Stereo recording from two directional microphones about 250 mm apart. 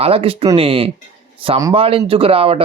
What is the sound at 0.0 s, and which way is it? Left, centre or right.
Speech, right.